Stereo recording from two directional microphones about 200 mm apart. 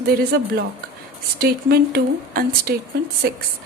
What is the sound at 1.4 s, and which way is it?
A woman's voice, 50° right (ahead or behind).